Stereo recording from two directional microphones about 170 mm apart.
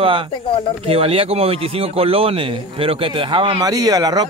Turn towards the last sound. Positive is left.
turn(degrees=-20)  # may be behind; listen again after turning